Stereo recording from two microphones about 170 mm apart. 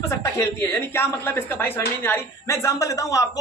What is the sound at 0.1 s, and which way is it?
Speech, 15° left (ahead or behind).